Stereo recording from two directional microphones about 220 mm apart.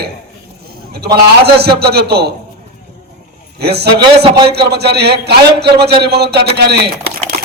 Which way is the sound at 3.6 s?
50° right (ahead or behind).